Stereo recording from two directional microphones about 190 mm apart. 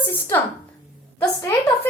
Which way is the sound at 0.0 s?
10° left (ahead or behind).